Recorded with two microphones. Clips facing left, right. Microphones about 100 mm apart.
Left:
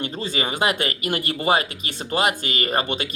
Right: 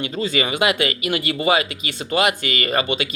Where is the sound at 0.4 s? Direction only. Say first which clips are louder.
Even; 45° left (ahead or behind).